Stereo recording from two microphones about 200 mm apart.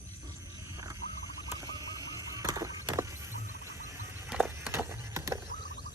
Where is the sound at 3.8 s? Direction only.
10° right (ahead or behind).